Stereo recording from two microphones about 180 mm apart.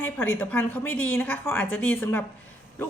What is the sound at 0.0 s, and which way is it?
A woman's voice, 10° left (ahead or behind).